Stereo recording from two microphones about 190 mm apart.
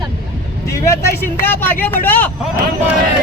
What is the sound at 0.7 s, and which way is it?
Vehicle, 15° left (ahead or behind).